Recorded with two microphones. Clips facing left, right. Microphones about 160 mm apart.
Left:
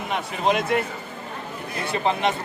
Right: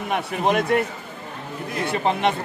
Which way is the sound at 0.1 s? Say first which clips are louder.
Right 2 dB; 55° right (ahead or behind).